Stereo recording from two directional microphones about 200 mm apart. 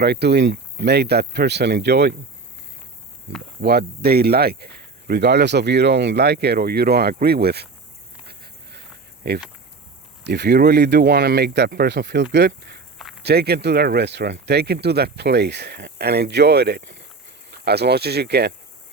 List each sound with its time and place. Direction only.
0.0 s speech: 55° right (ahead or behind)
3.6 s speech: 50° right (ahead or behind)
8.3 s a sound: 55° right (ahead or behind)
9.2 s speech: 55° right (ahead or behind)